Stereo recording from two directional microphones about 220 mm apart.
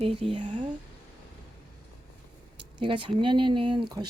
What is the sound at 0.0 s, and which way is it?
Speech, 25° right (ahead or behind).